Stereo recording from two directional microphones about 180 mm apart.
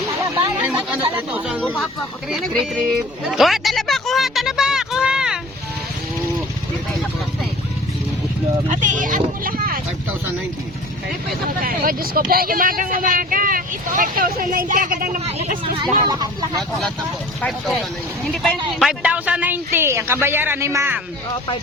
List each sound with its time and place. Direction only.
0.2 s a sound: 15° right (ahead or behind)
1.1 s speech: 10° right (ahead or behind)
3.2 s music: centre (ahead or behind)
8.7 s speech: 45° right (ahead or behind)
11.6 s speech: 55° right (ahead or behind)
15.2 s speech: 35° right (ahead or behind)
15.8 s speech: 20° right (ahead or behind)
16.6 s speech: 5° left (ahead or behind)
18.8 s speech: 5° right (ahead or behind)